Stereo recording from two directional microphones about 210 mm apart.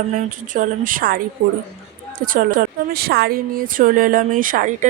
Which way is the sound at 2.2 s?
40° right (ahead or behind).